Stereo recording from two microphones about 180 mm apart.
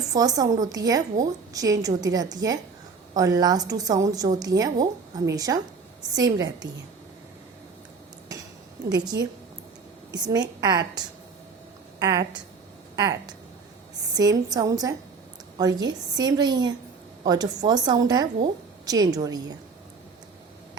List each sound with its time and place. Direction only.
0.1 s a woman's voice: 20° right (ahead or behind)
8.9 s a woman's voice: 20° right (ahead or behind)